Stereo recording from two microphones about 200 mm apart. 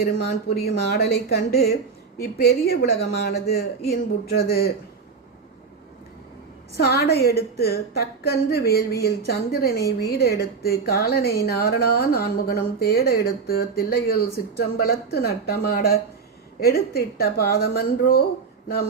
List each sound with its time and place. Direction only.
0.0 s a woman's voice: 50° left (ahead or behind)
6.7 s a woman's voice: 55° left (ahead or behind)